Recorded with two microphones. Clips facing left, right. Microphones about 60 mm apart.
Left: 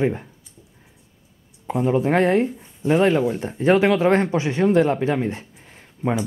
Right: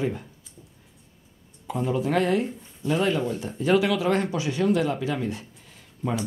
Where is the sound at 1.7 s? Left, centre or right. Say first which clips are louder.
Left 5 dB; left.